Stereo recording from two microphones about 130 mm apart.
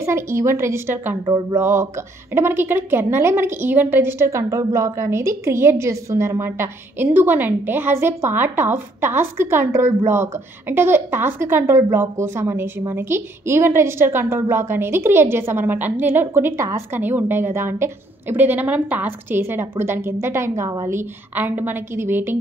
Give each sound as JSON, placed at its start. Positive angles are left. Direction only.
{"t": 0.0, "sound": "a woman's voice", "side_deg": -20}